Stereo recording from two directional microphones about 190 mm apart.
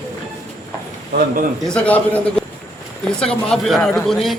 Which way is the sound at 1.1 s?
60° right (ahead or behind).